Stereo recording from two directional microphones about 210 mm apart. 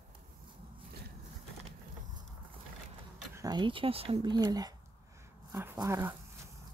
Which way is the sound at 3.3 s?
20° right (ahead or behind).